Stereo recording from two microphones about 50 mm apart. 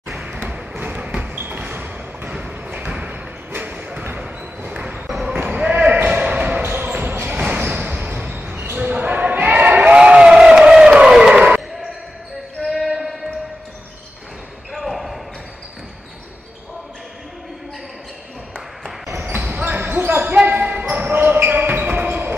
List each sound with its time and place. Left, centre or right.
0.2 s basketball bounce: right
1.6 s thump: right
4.6 s basketball bounce: right
7.3 s basketball bounce: right
9.9 s crowd: centre
10.7 s a sound: centre
11.3 s basketball bounce: right
12.6 s basketball bounce: centre
14.7 s basketball bounce: centre
19.5 s basketball bounce: right